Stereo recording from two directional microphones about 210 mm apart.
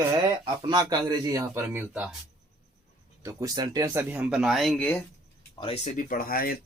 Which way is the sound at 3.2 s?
15° right (ahead or behind).